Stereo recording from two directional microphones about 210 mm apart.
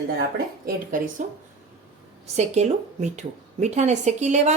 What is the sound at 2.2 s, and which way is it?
A woman's voice, 35° right (ahead or behind).